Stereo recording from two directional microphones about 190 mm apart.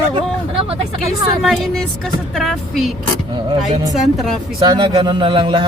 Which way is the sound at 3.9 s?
Centre (ahead or behind).